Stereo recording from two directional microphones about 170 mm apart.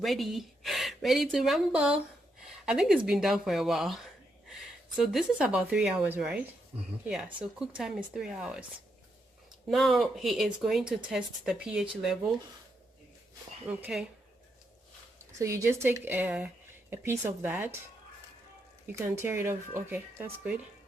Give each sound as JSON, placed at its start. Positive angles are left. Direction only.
{"t": 0.0, "sound": "speech", "side_deg": 0}
{"t": 9.6, "sound": "speech", "side_deg": 0}
{"t": 13.7, "sound": "speech", "side_deg": -10}
{"t": 15.4, "sound": "speech", "side_deg": -15}
{"t": 18.9, "sound": "speech", "side_deg": -15}